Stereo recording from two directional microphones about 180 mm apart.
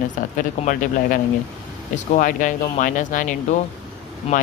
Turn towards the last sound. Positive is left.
turn(degrees=30)  # may be behind; listen again after turning